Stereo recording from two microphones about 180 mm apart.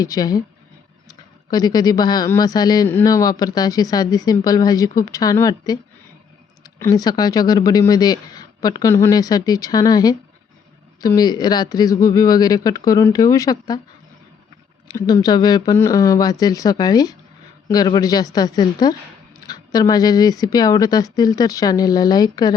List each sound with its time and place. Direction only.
0.0 s speech: 20° left (ahead or behind)
14.8 s speech: 25° left (ahead or behind)